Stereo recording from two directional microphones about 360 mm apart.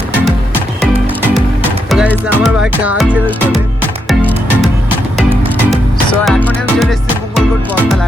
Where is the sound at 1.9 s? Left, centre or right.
Centre.